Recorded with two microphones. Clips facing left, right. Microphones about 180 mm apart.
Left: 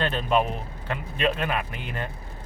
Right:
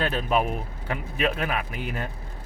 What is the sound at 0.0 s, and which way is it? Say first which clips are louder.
Speech: left 1 dB; 5° right (ahead or behind).